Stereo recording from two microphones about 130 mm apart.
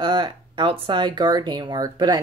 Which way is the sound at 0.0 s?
35° right (ahead or behind).